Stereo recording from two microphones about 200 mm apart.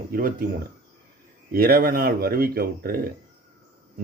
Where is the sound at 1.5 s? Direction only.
50° right (ahead or behind).